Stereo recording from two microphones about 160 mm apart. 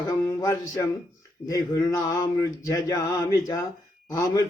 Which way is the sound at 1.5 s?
20° left (ahead or behind).